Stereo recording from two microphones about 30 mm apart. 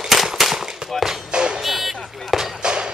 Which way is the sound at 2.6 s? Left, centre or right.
Right.